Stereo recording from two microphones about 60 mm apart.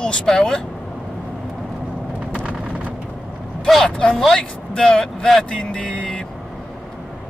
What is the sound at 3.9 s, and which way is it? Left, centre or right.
Speech, centre.